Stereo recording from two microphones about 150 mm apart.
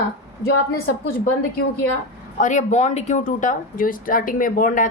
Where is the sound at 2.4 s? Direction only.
55° left (ahead or behind).